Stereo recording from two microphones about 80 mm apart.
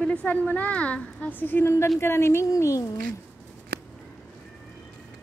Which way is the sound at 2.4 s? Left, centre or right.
Left.